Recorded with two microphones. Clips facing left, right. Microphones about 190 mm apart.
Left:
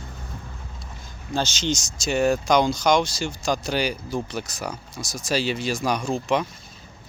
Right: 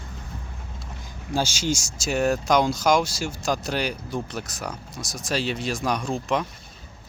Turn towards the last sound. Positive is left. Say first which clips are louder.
# left 2 dB
turn(degrees=0)  # may be behind; listen again after turning